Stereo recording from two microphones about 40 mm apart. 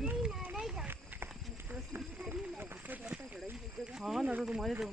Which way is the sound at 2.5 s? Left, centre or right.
Right.